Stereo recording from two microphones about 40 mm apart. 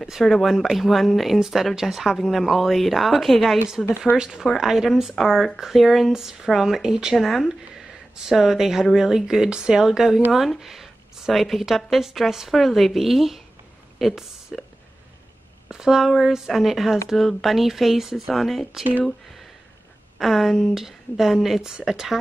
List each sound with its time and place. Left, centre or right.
0.2 s speech: centre
3.8 s speech: centre
4.2 s speech: centre
4.5 s speech: centre
7.2 s speech: centre
15.7 s speech: centre
20.2 s speech: centre
20.7 s speech: centre
21.6 s speech: centre